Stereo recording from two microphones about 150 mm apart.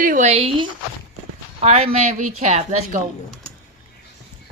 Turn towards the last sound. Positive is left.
turn(degrees=-50)  # may be behind; listen again after turning